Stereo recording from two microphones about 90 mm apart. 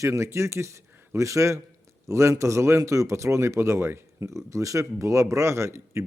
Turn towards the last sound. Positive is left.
turn(degrees=-30)  # may be behind; listen again after turning